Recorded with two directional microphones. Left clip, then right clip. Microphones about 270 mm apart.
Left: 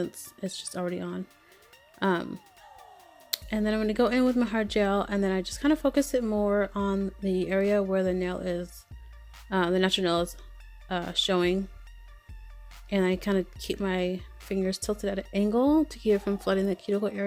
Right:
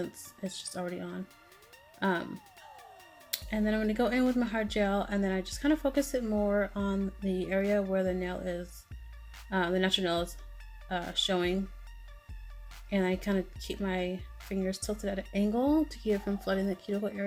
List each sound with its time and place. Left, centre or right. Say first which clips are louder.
0.0 s speech: left 5 dB; left
2.3 s music: left 2 dB; centre
3.2 s speech: left 3 dB; left
12.9 s speech: left 4 dB; left